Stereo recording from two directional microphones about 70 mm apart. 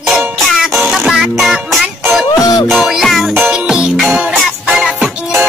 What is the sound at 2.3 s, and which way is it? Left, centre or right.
Music, left.